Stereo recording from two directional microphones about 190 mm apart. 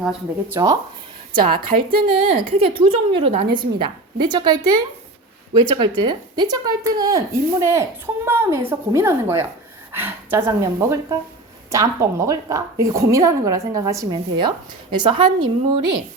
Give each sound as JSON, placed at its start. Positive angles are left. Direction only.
{"t": 0.0, "sound": "speech", "side_deg": 0}
{"t": 0.5, "sound": "a woman's voice", "side_deg": -15}
{"t": 1.5, "sound": "a woman's voice", "side_deg": -50}
{"t": 2.0, "sound": "a woman's voice", "side_deg": -25}
{"t": 6.0, "sound": "a woman's voice", "side_deg": -20}